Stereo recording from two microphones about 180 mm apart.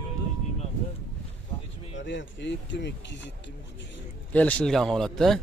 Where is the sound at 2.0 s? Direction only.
90° left.